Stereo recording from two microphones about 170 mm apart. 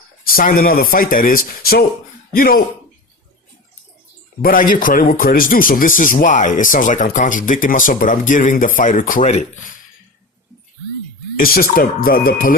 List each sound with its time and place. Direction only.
0.3 s speech: 55° left (ahead or behind)
4.4 s speech: 55° left (ahead or behind)
11.3 s speech: 60° left (ahead or behind)